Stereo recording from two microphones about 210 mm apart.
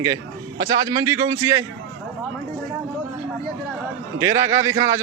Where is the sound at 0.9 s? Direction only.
15° right (ahead or behind).